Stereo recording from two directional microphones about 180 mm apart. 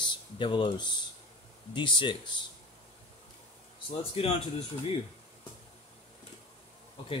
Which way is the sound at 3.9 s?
30° left (ahead or behind).